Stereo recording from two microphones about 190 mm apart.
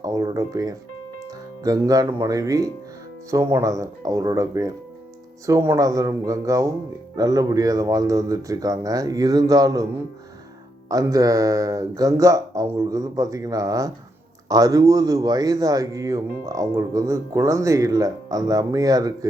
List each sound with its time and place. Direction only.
0.0 s speech: 20° right (ahead or behind)
10.8 s speech: 20° right (ahead or behind)